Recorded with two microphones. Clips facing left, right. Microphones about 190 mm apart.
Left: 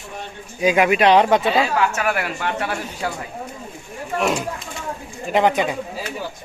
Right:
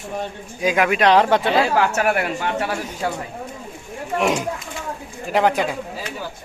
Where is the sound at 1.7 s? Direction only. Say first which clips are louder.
Right 2 dB; 70° right (ahead or behind).